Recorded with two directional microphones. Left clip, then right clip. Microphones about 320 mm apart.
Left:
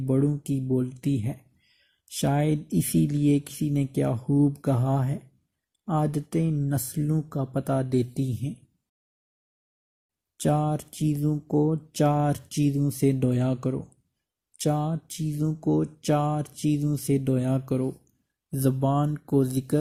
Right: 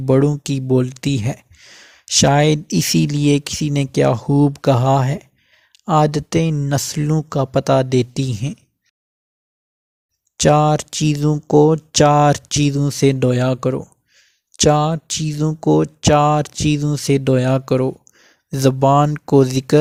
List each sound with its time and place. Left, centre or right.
0.0 s speech: right
10.4 s speech: right